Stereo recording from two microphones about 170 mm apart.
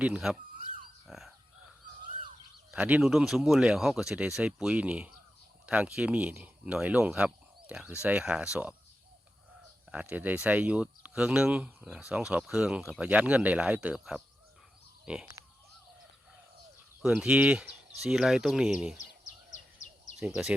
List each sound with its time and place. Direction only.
0.0 s speech: 5° right (ahead or behind)
1.0 s a sound: centre (ahead or behind)
2.7 s speech: 5° right (ahead or behind)
9.9 s speech: 5° right (ahead or behind)
17.0 s speech: 5° right (ahead or behind)
20.1 s speech: 5° right (ahead or behind)